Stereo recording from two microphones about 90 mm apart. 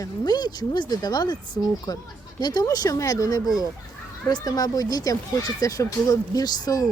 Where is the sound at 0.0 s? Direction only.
50° left (ahead or behind).